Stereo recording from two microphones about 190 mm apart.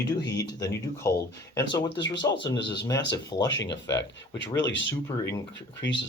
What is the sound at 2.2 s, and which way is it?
Speech, 20° left (ahead or behind).